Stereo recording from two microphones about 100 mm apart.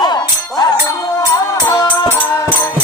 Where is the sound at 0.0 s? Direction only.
45° left (ahead or behind).